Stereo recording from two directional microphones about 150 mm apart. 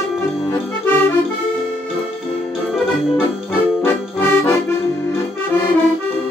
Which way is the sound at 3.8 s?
15° left (ahead or behind).